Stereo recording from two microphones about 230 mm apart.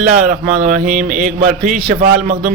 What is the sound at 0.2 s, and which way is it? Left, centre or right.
Mantra, right.